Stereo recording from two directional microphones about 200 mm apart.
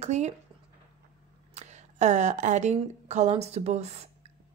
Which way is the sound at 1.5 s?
35° right (ahead or behind).